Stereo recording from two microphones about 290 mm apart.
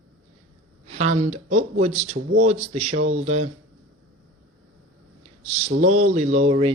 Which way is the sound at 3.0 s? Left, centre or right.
Right.